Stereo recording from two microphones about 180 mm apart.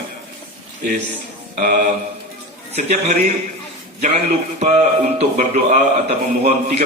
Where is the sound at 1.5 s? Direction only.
50° right (ahead or behind).